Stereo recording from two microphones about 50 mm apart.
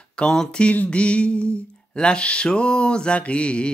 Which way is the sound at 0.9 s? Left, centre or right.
Left.